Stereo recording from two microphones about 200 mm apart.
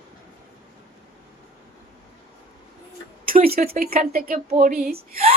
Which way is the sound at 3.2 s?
45° right (ahead or behind).